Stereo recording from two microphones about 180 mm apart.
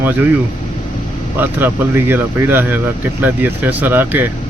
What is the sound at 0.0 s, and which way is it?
Speech, 10° right (ahead or behind).